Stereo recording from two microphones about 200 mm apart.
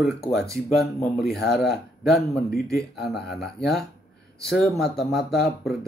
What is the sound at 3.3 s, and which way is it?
Speech, centre (ahead or behind).